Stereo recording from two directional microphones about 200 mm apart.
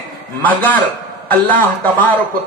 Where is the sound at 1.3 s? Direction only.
10° left (ahead or behind).